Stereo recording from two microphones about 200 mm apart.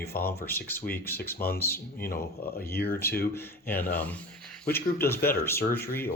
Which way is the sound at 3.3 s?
10° left (ahead or behind).